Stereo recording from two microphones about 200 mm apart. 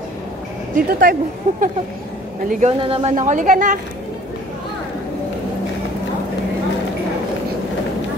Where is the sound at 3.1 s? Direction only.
40° right (ahead or behind).